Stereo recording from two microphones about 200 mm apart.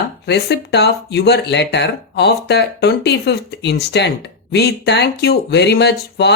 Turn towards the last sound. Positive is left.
turn(degrees=55)  # may be behind; listen again after turning